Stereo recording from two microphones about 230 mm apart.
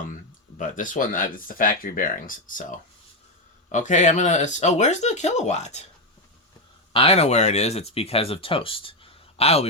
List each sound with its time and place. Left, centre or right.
0.6 s speech: left
6.9 s speech: left